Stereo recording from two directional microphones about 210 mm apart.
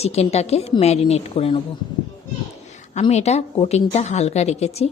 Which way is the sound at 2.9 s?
30° left (ahead or behind).